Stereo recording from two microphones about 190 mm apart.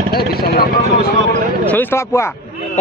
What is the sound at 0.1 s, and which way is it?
Speech, 55° left (ahead or behind).